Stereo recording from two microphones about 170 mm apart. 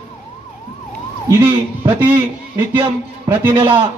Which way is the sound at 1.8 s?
10° right (ahead or behind).